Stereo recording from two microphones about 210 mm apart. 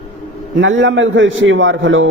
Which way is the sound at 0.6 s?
60° right (ahead or behind).